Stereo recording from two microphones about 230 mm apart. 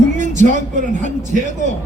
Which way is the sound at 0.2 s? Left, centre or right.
Right.